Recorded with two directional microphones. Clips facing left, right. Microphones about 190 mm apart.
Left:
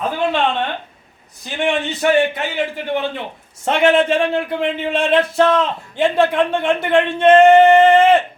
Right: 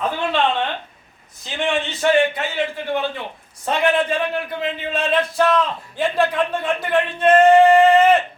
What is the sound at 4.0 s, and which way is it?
A man's voice, 25° left (ahead or behind).